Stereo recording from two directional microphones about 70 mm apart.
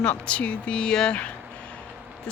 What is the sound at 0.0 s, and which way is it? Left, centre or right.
Speech, centre.